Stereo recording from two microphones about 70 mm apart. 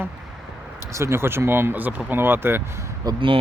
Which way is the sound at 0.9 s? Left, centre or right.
Right.